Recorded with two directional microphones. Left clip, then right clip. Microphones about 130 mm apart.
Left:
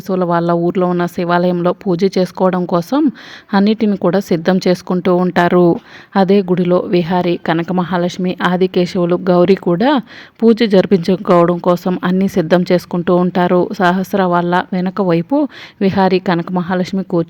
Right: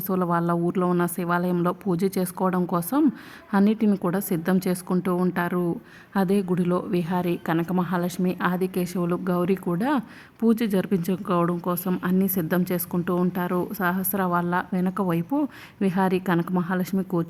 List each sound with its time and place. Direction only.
0.1 s a woman's voice: 25° left (ahead or behind)
5.3 s speech: 50° left (ahead or behind)
6.1 s a woman's voice: 35° left (ahead or behind)